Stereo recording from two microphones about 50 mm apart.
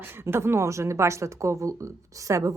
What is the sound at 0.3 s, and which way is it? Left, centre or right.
Speech, right.